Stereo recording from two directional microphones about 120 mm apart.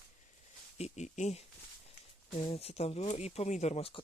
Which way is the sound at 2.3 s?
55° left (ahead or behind).